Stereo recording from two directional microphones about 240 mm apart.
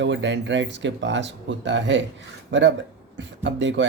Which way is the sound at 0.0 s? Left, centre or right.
Right.